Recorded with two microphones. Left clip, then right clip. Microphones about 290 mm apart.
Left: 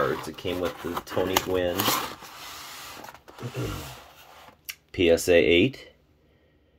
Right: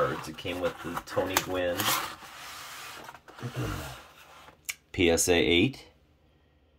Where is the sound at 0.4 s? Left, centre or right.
Left.